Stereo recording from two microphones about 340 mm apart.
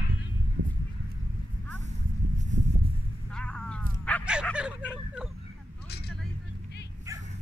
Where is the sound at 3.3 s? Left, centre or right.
Centre.